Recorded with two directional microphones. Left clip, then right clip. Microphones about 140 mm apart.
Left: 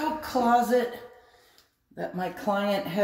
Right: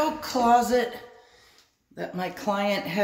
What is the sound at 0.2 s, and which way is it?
Speech, 5° right (ahead or behind).